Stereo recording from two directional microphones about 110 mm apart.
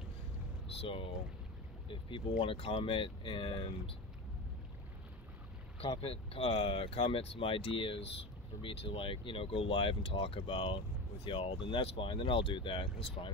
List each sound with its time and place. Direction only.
0.8 s speech: 55° left (ahead or behind)
5.9 s speech: 60° left (ahead or behind)